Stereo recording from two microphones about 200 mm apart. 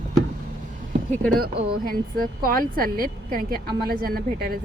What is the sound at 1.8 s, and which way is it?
Speech, 45° right (ahead or behind).